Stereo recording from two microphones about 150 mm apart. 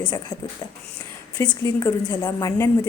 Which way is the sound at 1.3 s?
15° left (ahead or behind).